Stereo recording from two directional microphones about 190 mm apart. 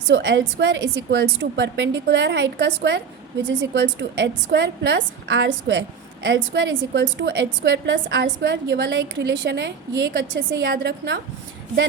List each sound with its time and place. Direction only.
0.1 s a woman's voice: 70° right (ahead or behind)